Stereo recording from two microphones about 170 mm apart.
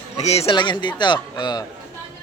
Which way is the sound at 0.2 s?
40° left (ahead or behind).